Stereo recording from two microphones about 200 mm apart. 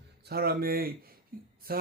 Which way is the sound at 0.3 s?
50° right (ahead or behind).